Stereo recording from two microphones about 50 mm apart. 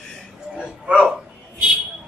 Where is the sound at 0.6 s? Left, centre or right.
Centre.